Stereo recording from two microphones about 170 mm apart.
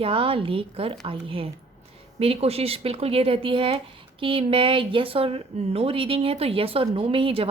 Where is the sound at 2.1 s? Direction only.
35° right (ahead or behind).